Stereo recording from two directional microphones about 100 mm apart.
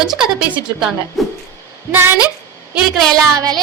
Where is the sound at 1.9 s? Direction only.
20° right (ahead or behind).